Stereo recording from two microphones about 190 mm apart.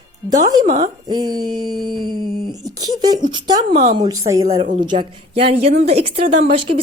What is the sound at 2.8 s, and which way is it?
Speech, 20° right (ahead or behind).